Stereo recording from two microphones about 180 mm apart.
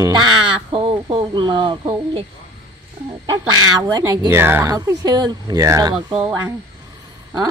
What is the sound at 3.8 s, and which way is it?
Speech, 20° right (ahead or behind).